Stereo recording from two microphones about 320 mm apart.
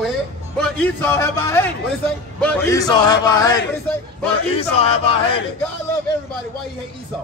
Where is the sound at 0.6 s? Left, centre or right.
Centre.